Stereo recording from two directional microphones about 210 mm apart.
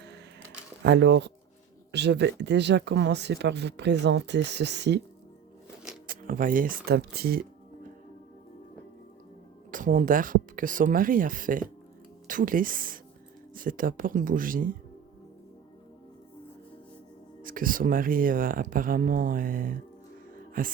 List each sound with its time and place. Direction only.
0.8 s speech: 55° right (ahead or behind)
6.1 s speech: 40° right (ahead or behind)
9.7 s speech: 40° right (ahead or behind)
17.4 s speech: 40° right (ahead or behind)
20.3 s music: 40° right (ahead or behind)